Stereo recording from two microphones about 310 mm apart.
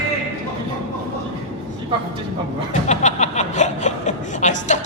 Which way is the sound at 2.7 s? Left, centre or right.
Left.